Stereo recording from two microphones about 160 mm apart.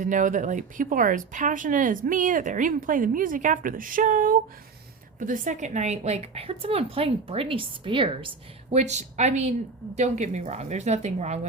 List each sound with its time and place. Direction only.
0.0 s a woman's voice: 55° right (ahead or behind); by 8.3 s 30° right (ahead or behind)
8.7 s a woman's voice: 45° right (ahead or behind)